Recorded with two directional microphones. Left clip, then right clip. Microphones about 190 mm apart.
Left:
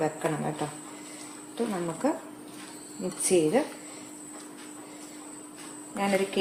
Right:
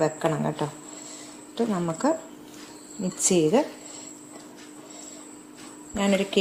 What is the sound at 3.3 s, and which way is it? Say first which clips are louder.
Speech: right 1 dB; 45° right (ahead or behind).